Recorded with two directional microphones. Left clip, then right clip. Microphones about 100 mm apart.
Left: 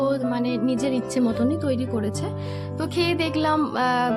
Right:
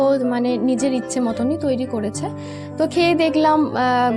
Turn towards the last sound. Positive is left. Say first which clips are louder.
# right 4 dB
turn(degrees=-35)  # may be behind; listen again after turning